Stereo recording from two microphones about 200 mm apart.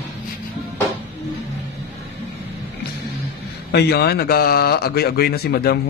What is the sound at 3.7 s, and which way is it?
A man's voice, 55° left (ahead or behind).